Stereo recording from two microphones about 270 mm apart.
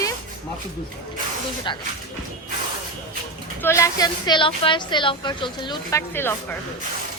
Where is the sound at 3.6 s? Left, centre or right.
Centre.